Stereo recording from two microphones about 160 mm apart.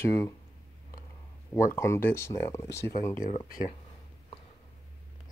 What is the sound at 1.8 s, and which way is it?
Speech, 15° left (ahead or behind).